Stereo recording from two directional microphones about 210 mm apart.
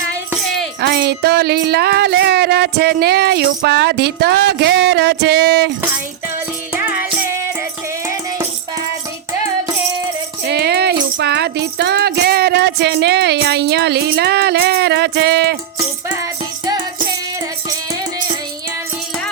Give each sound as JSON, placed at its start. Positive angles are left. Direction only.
{"t": 0.4, "sound": "tambourine", "side_deg": 0}
{"t": 0.8, "sound": "speech", "side_deg": -50}
{"t": 8.0, "sound": "music", "side_deg": -15}
{"t": 10.4, "sound": "music", "side_deg": -50}